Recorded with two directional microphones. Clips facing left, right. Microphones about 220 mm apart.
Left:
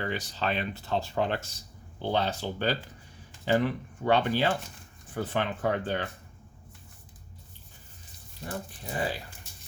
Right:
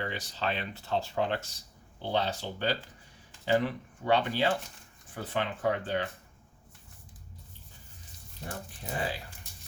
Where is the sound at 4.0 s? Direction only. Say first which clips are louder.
Left 2 dB; 50° left (ahead or behind).